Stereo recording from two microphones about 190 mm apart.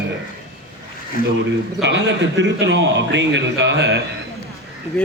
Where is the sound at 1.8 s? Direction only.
70° right (ahead or behind).